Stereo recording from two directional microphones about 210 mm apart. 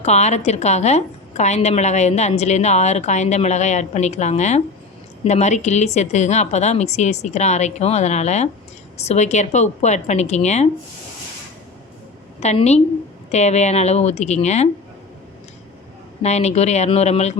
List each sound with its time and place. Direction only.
0.0 s a woman's voice: 30° left (ahead or behind)
12.4 s a woman's voice: 30° left (ahead or behind)
16.2 s a woman's voice: 30° left (ahead or behind)